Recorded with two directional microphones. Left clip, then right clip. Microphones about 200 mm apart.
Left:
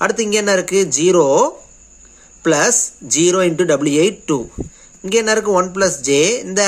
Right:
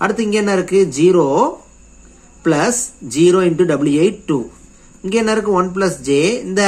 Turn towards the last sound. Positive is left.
turn(degrees=25)  # may be behind; listen again after turning